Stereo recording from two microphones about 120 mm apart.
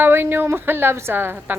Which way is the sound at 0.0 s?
20° right (ahead or behind).